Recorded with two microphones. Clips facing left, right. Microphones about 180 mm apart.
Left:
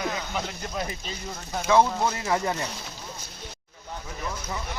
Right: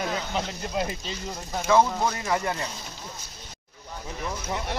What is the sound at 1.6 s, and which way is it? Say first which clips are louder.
Speech: even; centre (ahead or behind).